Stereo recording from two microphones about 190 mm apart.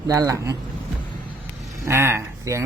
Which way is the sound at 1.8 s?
15° right (ahead or behind).